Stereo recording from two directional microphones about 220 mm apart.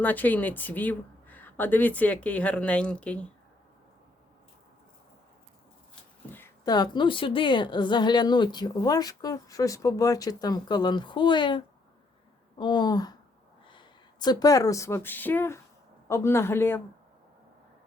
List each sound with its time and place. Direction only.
0.0 s speech: 10° left (ahead or behind)
6.3 s a woman's voice: 15° left (ahead or behind)